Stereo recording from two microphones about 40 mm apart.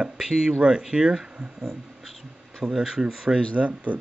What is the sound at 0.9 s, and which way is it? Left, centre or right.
Speech, right.